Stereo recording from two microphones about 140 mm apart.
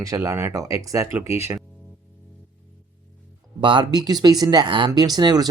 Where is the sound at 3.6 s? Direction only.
35° right (ahead or behind).